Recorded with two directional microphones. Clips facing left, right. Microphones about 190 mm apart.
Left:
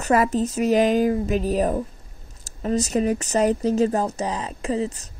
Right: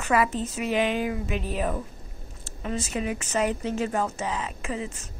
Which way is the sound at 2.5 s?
40° left (ahead or behind).